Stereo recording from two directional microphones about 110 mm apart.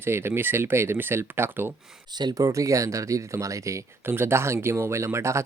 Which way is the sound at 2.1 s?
35° right (ahead or behind).